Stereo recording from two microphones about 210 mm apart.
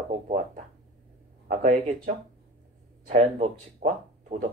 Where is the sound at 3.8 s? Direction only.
35° right (ahead or behind).